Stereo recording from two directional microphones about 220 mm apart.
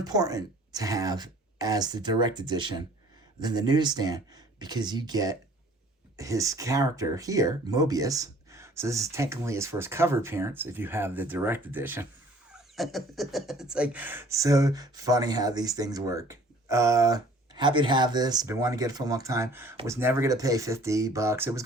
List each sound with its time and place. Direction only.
0.0 s speech: 15° right (ahead or behind)